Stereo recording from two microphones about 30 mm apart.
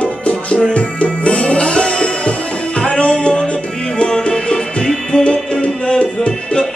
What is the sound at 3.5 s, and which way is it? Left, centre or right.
Music, left.